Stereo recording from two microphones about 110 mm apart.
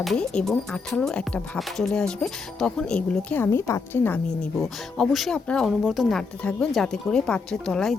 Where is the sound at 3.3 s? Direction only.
20° left (ahead or behind).